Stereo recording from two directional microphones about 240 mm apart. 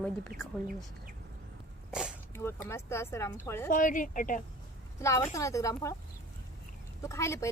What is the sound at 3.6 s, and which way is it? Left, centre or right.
Speech, left.